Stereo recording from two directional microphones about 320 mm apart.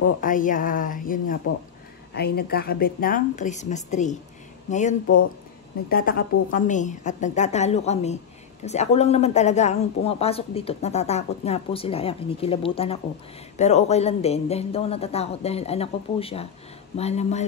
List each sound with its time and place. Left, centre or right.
0.2 s speech: left